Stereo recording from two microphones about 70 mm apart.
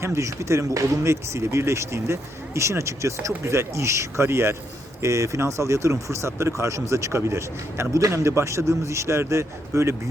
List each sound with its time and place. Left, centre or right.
0.0 s speech: right